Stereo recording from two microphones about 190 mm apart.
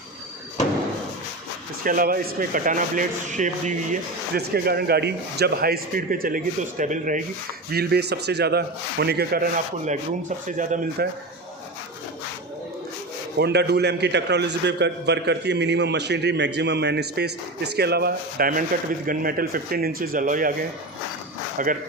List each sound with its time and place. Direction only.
1.8 s a man's voice: 50° right (ahead or behind)
4.4 s a man's voice: 55° right (ahead or behind)
7.7 s a man's voice: 55° right (ahead or behind)
13.4 s a man's voice: 60° right (ahead or behind); by 21.7 s 45° right (ahead or behind)